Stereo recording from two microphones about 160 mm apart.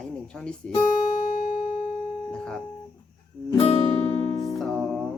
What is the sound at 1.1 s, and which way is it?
Music, 55° left (ahead or behind).